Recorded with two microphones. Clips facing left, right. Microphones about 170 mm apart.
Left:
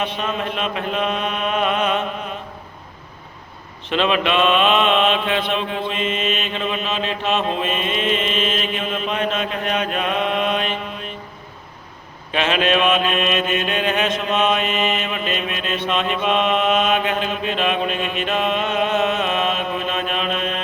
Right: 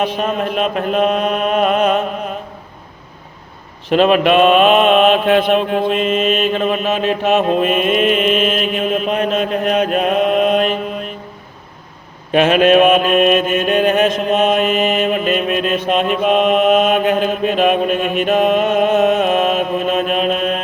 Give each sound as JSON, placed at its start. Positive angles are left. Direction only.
{"t": 0.0, "sound": "mantra", "side_deg": -40}
{"t": 3.8, "sound": "mantra", "side_deg": -45}
{"t": 12.3, "sound": "mantra", "side_deg": -50}